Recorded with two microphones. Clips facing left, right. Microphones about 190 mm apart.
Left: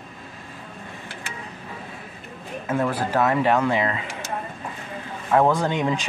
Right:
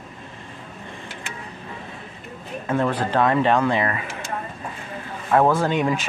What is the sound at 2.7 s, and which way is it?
Speech, 10° left (ahead or behind).